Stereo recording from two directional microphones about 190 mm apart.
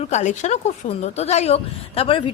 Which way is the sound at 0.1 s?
40° left (ahead or behind).